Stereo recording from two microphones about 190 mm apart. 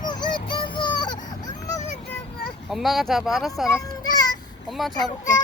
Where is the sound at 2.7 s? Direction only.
Centre (ahead or behind).